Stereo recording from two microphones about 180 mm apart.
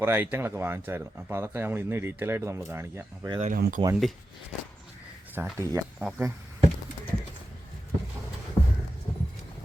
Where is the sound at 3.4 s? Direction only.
45° right (ahead or behind).